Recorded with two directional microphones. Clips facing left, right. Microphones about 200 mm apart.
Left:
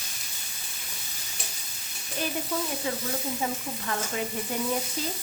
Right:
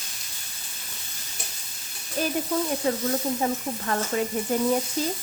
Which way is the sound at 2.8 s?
40° right (ahead or behind).